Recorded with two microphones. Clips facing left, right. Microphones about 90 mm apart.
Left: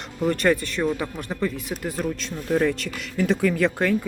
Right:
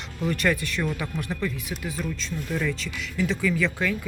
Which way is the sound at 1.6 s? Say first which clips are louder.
Left 4 dB; 45° left (ahead or behind).